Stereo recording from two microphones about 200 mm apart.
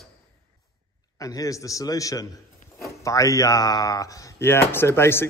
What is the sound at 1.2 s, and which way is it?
Speech, 15° left (ahead or behind).